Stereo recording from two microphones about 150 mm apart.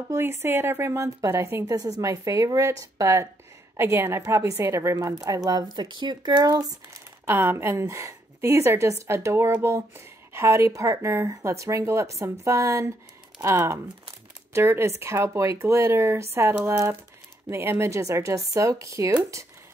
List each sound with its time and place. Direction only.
0.1 s speech: 15° right (ahead or behind)